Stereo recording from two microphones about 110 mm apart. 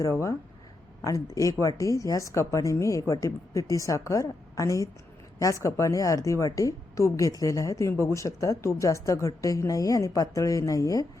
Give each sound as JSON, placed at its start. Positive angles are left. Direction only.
{"t": 0.0, "sound": "a woman's voice", "side_deg": 30}